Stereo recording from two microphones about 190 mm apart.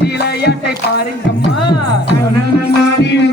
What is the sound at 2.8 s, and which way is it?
Music, 65° left (ahead or behind).